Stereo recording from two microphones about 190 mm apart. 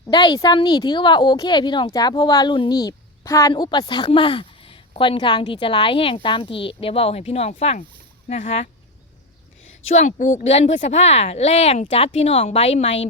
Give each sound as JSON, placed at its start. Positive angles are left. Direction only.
{"t": 0.1, "sound": "speech", "side_deg": 20}
{"t": 9.8, "sound": "speech", "side_deg": 35}